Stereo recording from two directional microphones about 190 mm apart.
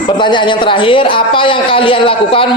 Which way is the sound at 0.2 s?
25° left (ahead or behind).